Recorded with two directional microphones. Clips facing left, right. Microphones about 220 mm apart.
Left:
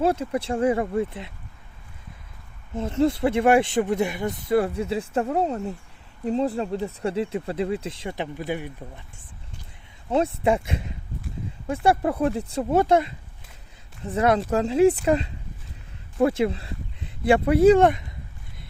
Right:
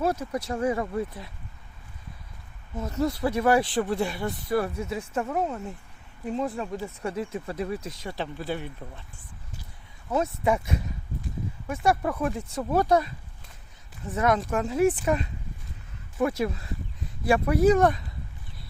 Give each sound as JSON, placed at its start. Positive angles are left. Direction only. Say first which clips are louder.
{"t": 0.0, "sound": "speech", "louder": "left 4 dB", "side_deg": 30}
{"t": 2.7, "sound": "speech", "louder": "left 5 dB", "side_deg": 25}
{"t": 10.1, "sound": "speech", "louder": "left 3 dB", "side_deg": 30}